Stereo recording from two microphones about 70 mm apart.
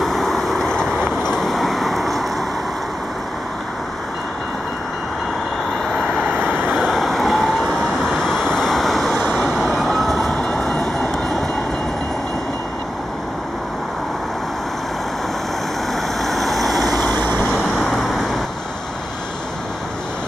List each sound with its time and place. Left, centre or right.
0.0 s vehicle: centre
5.9 s vehicle: centre
9.1 s vehicle: left
9.4 s vehicle: centre
10.4 s train: centre
16.2 s vehicle: centre
17.0 s vehicle: left
17.5 s vehicle: centre